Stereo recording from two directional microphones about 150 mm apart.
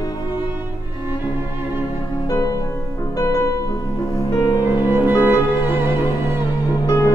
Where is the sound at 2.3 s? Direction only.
20° left (ahead or behind).